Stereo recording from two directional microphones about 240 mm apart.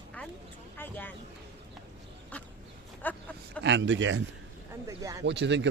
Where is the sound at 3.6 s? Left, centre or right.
Right.